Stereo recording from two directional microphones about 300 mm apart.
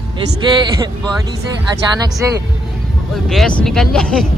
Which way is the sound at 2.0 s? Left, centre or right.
Centre.